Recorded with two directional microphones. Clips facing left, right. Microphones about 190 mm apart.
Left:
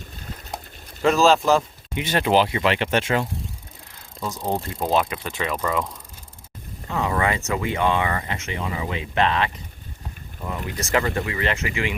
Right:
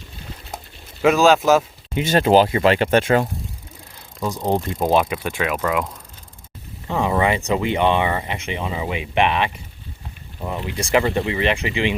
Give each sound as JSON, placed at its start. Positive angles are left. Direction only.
{"t": 1.0, "sound": "speech", "side_deg": 0}
{"t": 2.0, "sound": "speech", "side_deg": -35}
{"t": 4.2, "sound": "speech", "side_deg": -15}